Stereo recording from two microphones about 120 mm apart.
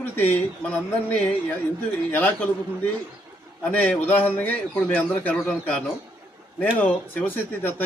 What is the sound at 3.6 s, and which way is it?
A man's voice, 10° left (ahead or behind).